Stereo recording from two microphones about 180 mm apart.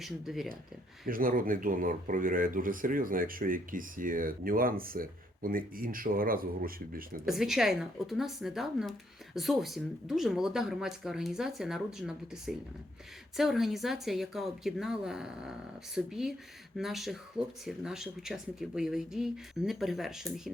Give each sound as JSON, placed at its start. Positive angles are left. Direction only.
{"t": 0.0, "sound": "a woman's voice", "side_deg": 0}
{"t": 1.0, "sound": "speech", "side_deg": -50}
{"t": 7.3, "sound": "a woman's voice", "side_deg": 0}